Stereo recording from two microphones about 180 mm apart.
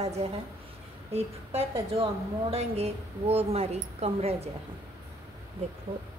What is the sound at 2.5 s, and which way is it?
Speech, 35° right (ahead or behind).